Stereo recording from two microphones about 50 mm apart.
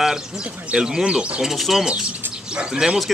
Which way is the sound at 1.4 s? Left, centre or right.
Centre.